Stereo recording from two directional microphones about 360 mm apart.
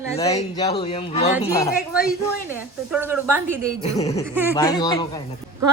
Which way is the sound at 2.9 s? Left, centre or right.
Centre.